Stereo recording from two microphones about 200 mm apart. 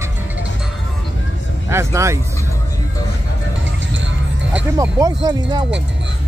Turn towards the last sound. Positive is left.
turn(degrees=-20)  # may be behind; listen again after turning